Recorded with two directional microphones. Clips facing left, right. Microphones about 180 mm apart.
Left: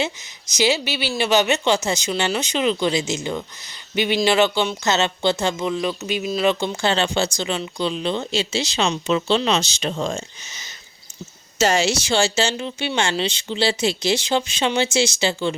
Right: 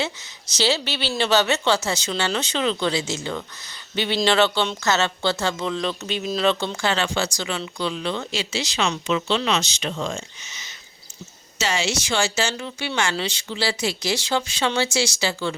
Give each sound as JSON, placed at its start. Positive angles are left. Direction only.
{"t": 0.5, "sound": "speech", "side_deg": 10}
{"t": 6.8, "sound": "speech", "side_deg": 25}